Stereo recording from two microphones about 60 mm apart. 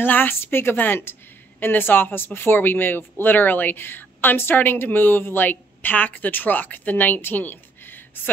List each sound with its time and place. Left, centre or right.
0.0 s speech: left